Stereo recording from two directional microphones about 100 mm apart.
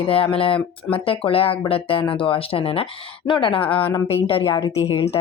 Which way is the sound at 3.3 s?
55° left (ahead or behind).